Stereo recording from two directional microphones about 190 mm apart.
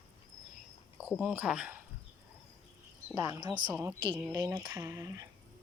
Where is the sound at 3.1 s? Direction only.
15° right (ahead or behind).